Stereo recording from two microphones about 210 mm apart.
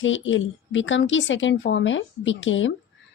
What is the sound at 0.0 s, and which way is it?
A woman's voice, 65° left (ahead or behind).